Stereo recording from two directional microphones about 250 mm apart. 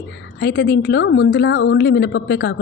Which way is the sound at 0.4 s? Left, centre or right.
Left.